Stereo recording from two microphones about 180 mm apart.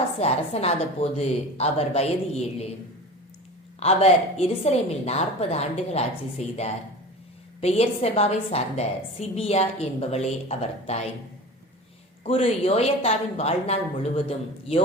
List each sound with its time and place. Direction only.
0.2 s a woman's voice: 35° left (ahead or behind)
3.8 s a woman's voice: 35° left (ahead or behind)
7.6 s a woman's voice: 35° left (ahead or behind)
12.2 s a woman's voice: 35° left (ahead or behind)